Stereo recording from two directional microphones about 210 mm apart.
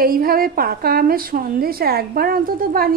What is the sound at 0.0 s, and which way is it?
A woman's voice, 45° right (ahead or behind).